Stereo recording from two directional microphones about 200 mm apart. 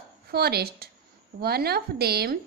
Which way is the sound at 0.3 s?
50° right (ahead or behind).